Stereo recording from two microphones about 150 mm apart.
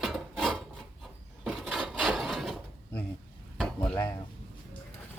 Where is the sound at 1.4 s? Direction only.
Centre (ahead or behind).